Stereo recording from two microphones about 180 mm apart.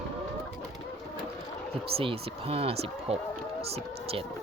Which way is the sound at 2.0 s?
30° right (ahead or behind).